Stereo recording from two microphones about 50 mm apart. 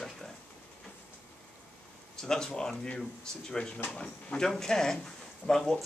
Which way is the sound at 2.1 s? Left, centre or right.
Centre.